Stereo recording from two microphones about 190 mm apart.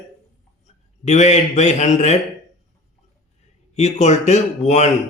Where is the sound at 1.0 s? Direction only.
35° left (ahead or behind).